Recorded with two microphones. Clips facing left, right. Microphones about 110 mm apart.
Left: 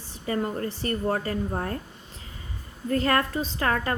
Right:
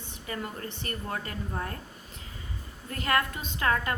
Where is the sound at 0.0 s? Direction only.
35° left (ahead or behind).